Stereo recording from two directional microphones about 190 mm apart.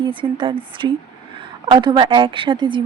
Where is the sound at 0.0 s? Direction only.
25° right (ahead or behind).